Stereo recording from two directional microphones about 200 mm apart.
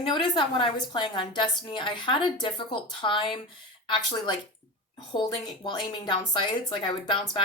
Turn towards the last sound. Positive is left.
turn(degrees=25)  # may be behind; listen again after turning